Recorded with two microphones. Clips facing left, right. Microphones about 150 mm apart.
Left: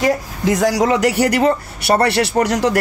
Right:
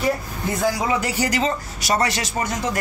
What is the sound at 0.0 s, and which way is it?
Speech, 85° left.